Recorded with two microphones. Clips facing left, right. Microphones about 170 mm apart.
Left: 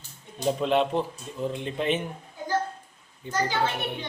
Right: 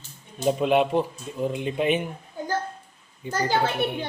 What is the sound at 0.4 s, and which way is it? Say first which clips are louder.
Speech: right 3 dB; 10° right (ahead or behind).